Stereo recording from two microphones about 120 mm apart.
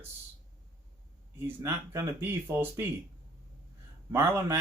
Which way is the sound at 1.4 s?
20° right (ahead or behind).